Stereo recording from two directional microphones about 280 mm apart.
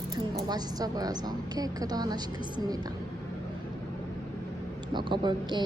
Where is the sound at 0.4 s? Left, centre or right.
Centre.